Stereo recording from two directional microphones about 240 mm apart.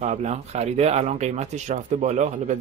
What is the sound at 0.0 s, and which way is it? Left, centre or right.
Speech, right.